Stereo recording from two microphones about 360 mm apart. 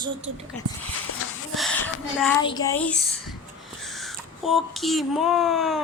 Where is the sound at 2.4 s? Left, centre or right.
Centre.